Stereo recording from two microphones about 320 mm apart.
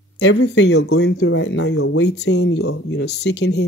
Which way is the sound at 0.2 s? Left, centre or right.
Left.